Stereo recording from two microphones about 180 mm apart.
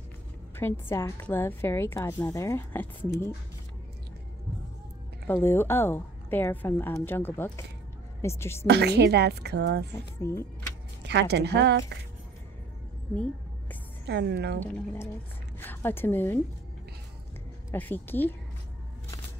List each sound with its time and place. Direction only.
0.6 s a woman's voice: 15° left (ahead or behind)
5.2 s a woman's voice: 10° left (ahead or behind)
8.6 s a woman's voice: 65° right (ahead or behind)
10.2 s a woman's voice: 15° left (ahead or behind)
11.1 s a woman's voice: 70° right (ahead or behind)
13.1 s a sound: 5° left (ahead or behind)
14.0 s a woman's voice: 70° right (ahead or behind)
15.6 s a woman's voice: 10° left (ahead or behind)
17.6 s a woman's voice: 10° left (ahead or behind)